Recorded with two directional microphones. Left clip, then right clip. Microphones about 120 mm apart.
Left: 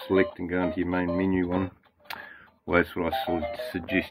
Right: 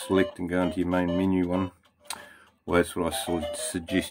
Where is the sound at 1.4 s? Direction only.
15° right (ahead or behind).